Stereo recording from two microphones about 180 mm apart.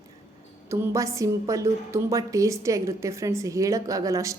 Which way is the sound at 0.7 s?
15° right (ahead or behind).